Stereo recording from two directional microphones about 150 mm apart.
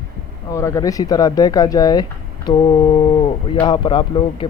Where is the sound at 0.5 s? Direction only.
20° left (ahead or behind).